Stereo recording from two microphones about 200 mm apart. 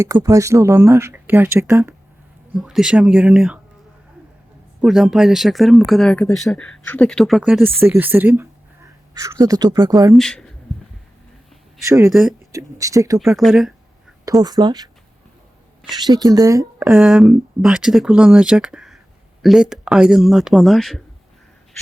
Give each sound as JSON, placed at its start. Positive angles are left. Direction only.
{"t": 0.0, "sound": "speech", "side_deg": -15}
{"t": 2.6, "sound": "speech", "side_deg": 0}
{"t": 4.8, "sound": "speech", "side_deg": 0}
{"t": 10.2, "sound": "speech", "side_deg": 5}
{"t": 12.0, "sound": "speech", "side_deg": 0}
{"t": 12.5, "sound": "speech", "side_deg": -15}
{"t": 13.1, "sound": "speech", "side_deg": 0}
{"t": 14.4, "sound": "a woman's voice", "side_deg": -20}
{"t": 16.0, "sound": "a woman's voice", "side_deg": -20}
{"t": 16.8, "sound": "speech", "side_deg": 0}